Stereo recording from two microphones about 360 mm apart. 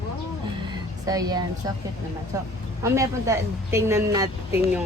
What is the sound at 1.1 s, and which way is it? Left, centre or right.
A woman's voice, centre.